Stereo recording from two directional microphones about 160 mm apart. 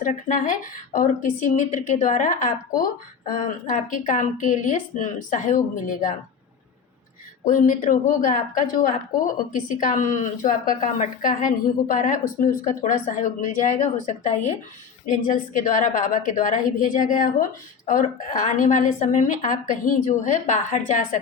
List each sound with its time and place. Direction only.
0.0 s a woman's voice: 55° left (ahead or behind)
7.4 s a woman's voice: 55° left (ahead or behind)
15.0 s a woman's voice: 55° left (ahead or behind)